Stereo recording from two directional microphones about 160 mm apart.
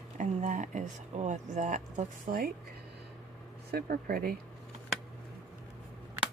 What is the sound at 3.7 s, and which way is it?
Speech, 65° right (ahead or behind).